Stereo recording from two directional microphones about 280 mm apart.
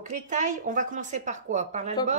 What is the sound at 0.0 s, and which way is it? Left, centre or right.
A woman's voice, right.